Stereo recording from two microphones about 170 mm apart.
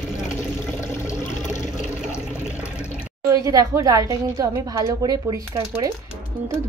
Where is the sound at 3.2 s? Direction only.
20° right (ahead or behind).